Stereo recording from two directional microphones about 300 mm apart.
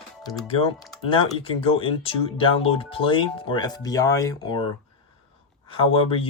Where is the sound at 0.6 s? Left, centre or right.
Centre.